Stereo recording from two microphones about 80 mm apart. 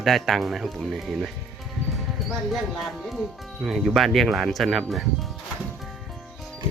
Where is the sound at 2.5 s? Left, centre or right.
Centre.